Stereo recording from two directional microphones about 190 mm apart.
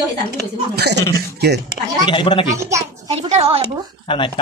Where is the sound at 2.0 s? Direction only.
25° left (ahead or behind).